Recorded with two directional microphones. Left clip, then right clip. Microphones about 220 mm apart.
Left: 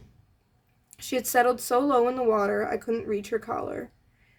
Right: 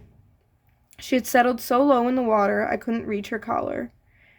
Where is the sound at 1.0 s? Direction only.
35° right (ahead or behind).